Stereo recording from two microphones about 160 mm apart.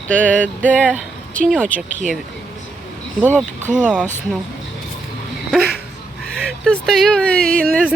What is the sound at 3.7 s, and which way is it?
Speech, 5° right (ahead or behind).